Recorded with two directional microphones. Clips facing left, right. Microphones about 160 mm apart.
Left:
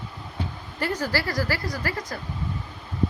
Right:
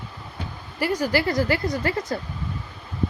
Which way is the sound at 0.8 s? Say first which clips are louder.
Right 4 dB; 10° right (ahead or behind).